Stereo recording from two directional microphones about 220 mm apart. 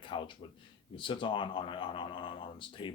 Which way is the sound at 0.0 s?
20° left (ahead or behind).